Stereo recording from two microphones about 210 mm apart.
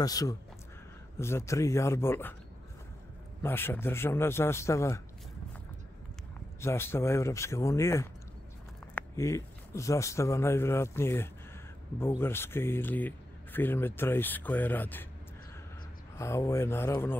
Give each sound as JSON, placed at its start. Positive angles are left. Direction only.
{"t": 0.0, "sound": "speech", "side_deg": 15}
{"t": 3.4, "sound": "speech", "side_deg": 10}
{"t": 6.6, "sound": "speech", "side_deg": 10}
{"t": 16.2, "sound": "speech", "side_deg": 15}